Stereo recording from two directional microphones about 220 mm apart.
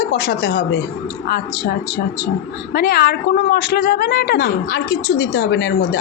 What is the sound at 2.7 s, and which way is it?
Speech, 45° left (ahead or behind).